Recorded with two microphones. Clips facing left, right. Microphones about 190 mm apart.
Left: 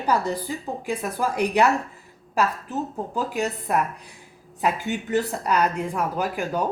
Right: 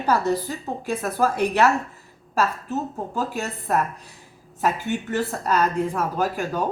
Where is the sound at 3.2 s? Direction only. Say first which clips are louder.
Left 2 dB; 15° left (ahead or behind).